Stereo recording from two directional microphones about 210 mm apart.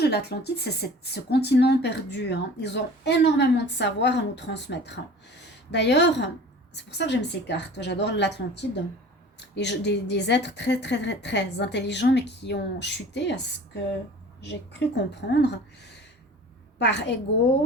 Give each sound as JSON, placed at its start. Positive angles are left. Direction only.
{"t": 0.0, "sound": "a woman's voice", "side_deg": 50}